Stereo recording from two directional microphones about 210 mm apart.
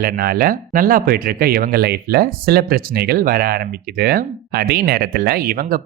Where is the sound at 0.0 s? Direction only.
45° right (ahead or behind).